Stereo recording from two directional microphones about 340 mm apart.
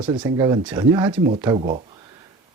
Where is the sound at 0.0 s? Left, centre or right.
Centre.